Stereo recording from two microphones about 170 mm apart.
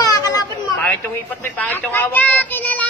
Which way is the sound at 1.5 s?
10° left (ahead or behind).